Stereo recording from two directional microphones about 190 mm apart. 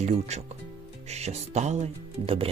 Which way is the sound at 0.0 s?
35° right (ahead or behind).